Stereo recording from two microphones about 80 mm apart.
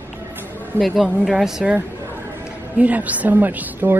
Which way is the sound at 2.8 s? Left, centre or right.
Centre.